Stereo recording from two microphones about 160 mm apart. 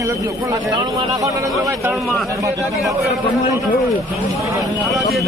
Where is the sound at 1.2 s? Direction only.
20° right (ahead or behind).